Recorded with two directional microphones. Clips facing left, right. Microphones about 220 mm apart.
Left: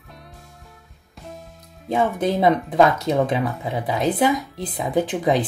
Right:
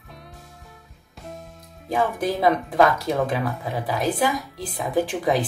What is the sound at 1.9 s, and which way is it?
Speech, 20° left (ahead or behind).